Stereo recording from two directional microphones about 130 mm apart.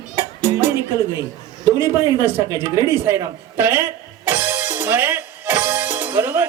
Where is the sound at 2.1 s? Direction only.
20° right (ahead or behind).